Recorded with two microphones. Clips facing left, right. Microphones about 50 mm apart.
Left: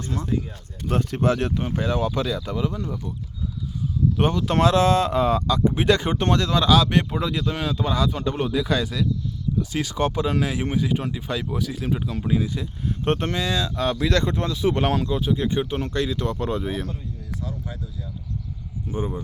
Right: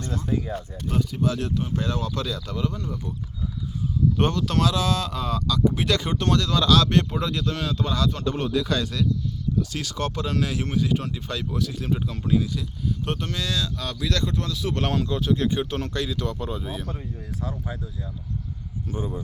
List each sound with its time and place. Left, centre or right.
0.9 s speech: left
1.7 s speech: left
4.2 s speech: centre
4.4 s speech: left; by 12.5 s centre
13.1 s speech: left
13.3 s speech: left
14.8 s speech: centre
15.9 s speech: left
18.9 s speech: left